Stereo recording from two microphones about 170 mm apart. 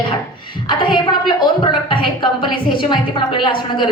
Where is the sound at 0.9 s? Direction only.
25° left (ahead or behind).